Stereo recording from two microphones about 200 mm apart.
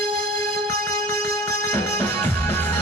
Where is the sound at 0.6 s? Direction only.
15° left (ahead or behind).